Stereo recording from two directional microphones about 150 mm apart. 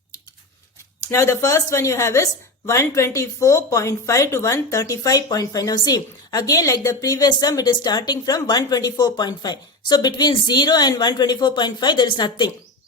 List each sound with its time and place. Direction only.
1.0 s a woman's voice: 20° left (ahead or behind)